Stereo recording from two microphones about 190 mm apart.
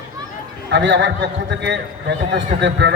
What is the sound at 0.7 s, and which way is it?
A man's voice, 70° right (ahead or behind).